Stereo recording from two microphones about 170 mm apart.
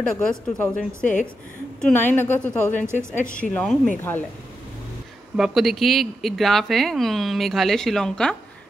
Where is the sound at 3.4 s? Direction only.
5° left (ahead or behind).